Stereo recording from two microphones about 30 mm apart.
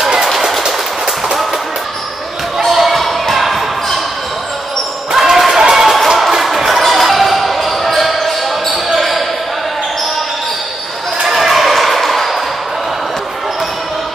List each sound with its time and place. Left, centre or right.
2.6 s basketball bounce: centre
5.1 s basketball bounce: centre
5.5 s run: centre
5.9 s basketball bounce: centre
11.3 s a sound: centre